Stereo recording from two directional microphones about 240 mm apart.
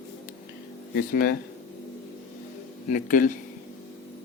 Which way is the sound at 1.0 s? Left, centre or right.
Left.